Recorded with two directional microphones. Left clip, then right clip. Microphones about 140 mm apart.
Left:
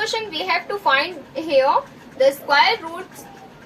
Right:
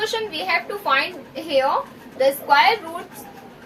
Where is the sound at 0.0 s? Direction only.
15° right (ahead or behind).